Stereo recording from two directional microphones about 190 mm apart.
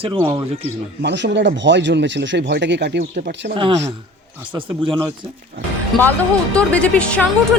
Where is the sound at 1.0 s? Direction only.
65° right (ahead or behind).